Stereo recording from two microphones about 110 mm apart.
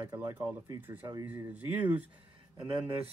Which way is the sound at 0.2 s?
20° right (ahead or behind).